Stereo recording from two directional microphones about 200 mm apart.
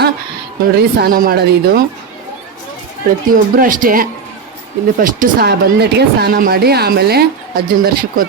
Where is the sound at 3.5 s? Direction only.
45° right (ahead or behind).